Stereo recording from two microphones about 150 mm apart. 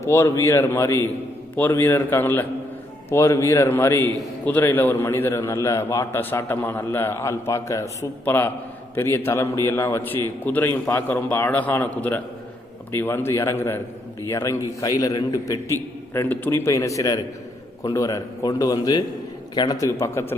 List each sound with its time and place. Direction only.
0.0 s a man's voice: 20° left (ahead or behind)
16.1 s a man's voice: 15° left (ahead or behind)